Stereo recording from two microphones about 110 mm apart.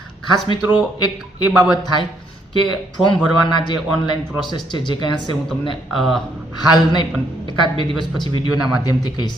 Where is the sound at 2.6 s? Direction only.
45° left (ahead or behind).